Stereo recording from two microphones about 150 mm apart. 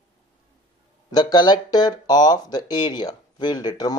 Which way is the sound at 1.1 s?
25° left (ahead or behind).